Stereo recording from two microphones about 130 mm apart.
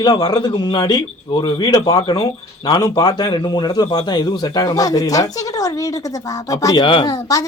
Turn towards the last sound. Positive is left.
turn(degrees=25)  # may be behind; listen again after turning